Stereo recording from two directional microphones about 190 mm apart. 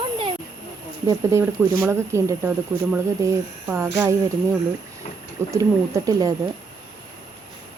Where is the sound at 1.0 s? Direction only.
15° right (ahead or behind).